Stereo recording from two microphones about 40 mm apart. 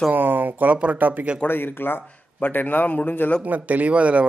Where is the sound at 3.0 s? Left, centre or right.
Left.